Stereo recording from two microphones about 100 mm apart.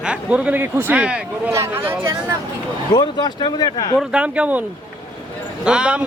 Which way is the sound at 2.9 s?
45° left (ahead or behind).